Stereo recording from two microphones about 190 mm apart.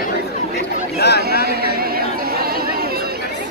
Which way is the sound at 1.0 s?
60° left (ahead or behind).